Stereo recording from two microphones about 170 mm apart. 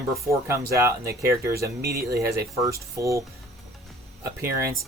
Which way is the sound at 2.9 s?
15° right (ahead or behind).